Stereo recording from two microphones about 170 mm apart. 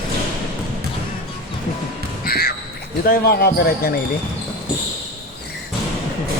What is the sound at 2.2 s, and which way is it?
Music, 65° left (ahead or behind).